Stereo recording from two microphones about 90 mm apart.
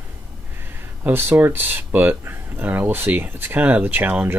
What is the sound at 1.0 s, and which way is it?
Speech, 25° right (ahead or behind).